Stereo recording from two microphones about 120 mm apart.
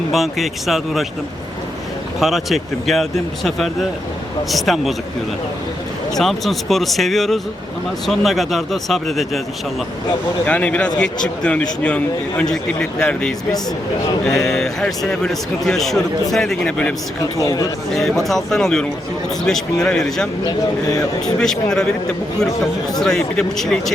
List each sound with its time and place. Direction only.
0.1 s a man's voice: centre (ahead or behind)
2.2 s a man's voice: centre (ahead or behind)
6.1 s a man's voice: centre (ahead or behind)
10.4 s a man's voice: 10° left (ahead or behind)
17.3 s speech: 30° left (ahead or behind)
17.9 s a man's voice: centre (ahead or behind)
21.3 s a man's voice: 5° left (ahead or behind)
23.0 s a man's voice: 5° left (ahead or behind)